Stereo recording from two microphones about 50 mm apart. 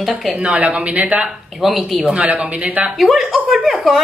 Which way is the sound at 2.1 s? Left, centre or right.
Right.